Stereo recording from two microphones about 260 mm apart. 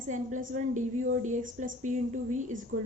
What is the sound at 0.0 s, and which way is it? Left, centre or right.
A woman's voice, right.